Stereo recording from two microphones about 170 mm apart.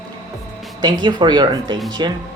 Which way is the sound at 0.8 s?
25° right (ahead or behind).